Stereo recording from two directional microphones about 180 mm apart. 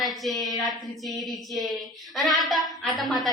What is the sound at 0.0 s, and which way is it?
A woman's voice, centre (ahead or behind).